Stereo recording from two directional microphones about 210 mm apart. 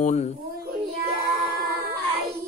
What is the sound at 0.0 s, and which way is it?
Speech, 30° left (ahead or behind).